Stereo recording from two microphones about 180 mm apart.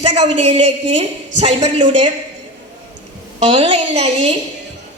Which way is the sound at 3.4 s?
30° right (ahead or behind).